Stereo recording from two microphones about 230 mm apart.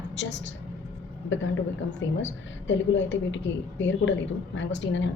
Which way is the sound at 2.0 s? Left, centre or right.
Left.